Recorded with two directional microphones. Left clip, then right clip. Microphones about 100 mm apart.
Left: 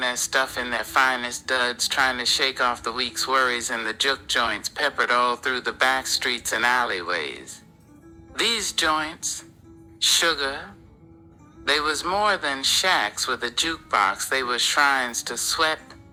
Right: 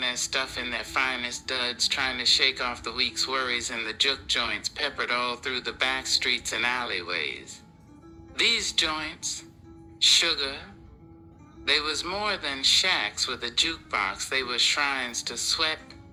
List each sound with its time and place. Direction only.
0.0 s speech: 50° left (ahead or behind)